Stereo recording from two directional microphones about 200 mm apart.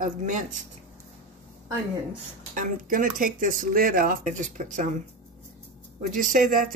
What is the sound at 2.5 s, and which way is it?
Speech, 40° right (ahead or behind).